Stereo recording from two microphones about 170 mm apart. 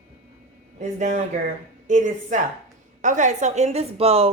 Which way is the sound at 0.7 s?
45° right (ahead or behind).